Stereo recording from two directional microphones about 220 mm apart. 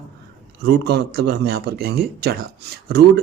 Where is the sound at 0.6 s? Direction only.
45° right (ahead or behind).